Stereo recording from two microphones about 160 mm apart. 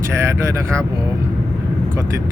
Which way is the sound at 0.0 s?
15° right (ahead or behind).